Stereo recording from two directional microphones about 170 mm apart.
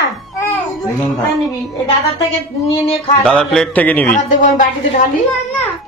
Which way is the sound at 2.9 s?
35° left (ahead or behind).